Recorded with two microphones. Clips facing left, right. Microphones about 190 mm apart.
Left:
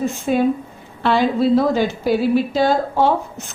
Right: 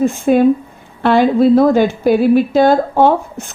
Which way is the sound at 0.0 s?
55° right (ahead or behind).